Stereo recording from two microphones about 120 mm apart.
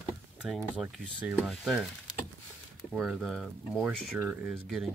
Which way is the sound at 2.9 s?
5° right (ahead or behind).